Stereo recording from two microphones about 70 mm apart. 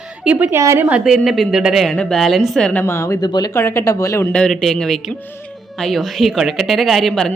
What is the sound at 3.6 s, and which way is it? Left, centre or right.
Speech, left.